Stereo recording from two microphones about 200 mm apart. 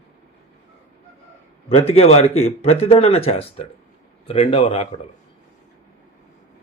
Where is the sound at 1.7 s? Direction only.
30° left (ahead or behind).